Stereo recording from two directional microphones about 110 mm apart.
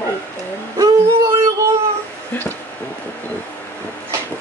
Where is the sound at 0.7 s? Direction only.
30° right (ahead or behind).